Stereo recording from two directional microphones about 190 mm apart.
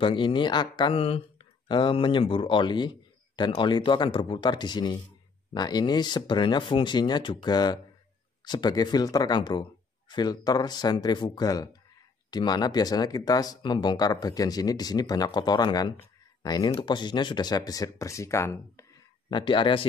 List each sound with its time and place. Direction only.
0.0 s speech: 25° left (ahead or behind)
19.3 s speech: 25° left (ahead or behind)